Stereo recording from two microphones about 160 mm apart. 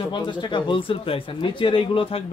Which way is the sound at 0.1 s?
30° left (ahead or behind).